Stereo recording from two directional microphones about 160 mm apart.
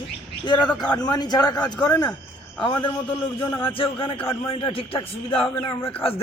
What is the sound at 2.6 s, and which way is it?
A man's voice, 30° left (ahead or behind).